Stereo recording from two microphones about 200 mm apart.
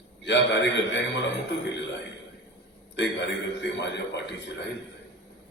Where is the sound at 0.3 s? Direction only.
60° left (ahead or behind).